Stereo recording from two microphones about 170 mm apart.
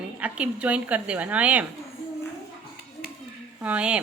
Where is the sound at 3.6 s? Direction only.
5° right (ahead or behind).